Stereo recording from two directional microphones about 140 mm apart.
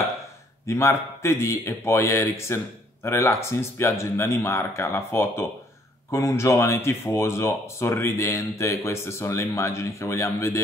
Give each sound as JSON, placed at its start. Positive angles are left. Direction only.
{"t": 0.7, "sound": "speech", "side_deg": 20}